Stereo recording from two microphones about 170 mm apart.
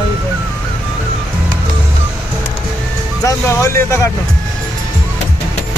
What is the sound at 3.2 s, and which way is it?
Music, 15° left (ahead or behind).